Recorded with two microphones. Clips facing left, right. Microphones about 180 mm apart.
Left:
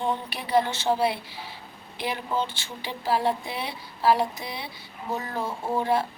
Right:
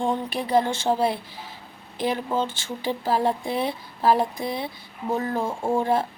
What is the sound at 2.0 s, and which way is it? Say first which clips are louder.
Speech: right 4 dB; 45° right (ahead or behind).